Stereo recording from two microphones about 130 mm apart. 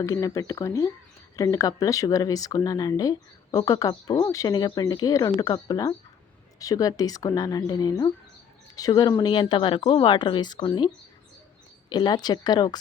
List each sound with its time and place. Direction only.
0.0 s speech: 25° left (ahead or behind)